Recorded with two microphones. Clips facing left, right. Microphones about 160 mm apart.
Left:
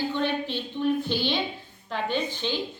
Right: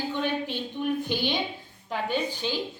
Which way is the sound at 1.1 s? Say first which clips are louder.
Left 1 dB; 15° right (ahead or behind).